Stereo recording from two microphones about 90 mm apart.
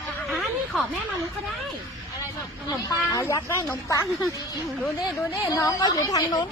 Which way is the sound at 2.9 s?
40° left (ahead or behind).